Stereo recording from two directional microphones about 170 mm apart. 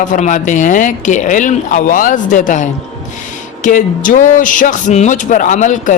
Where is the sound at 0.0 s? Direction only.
45° left (ahead or behind).